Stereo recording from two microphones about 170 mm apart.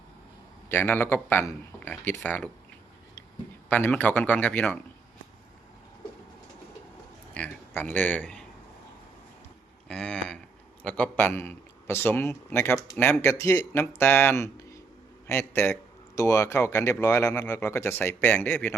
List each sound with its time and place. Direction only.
0.7 s a man's voice: 15° left (ahead or behind)
3.7 s a man's voice: 10° left (ahead or behind)
7.3 s speech: 10° left (ahead or behind)
9.9 s a man's voice: 5° left (ahead or behind)